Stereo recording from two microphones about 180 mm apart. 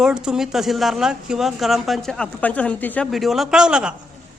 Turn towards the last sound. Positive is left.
turn(degrees=-5)  # may be behind; listen again after turning